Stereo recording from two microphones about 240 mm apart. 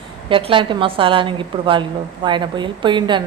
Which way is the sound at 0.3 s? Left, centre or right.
Right.